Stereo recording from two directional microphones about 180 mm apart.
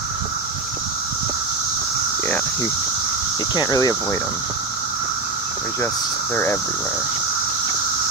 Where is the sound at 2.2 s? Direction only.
10° left (ahead or behind).